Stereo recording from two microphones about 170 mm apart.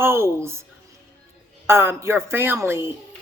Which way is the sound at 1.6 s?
15° right (ahead or behind).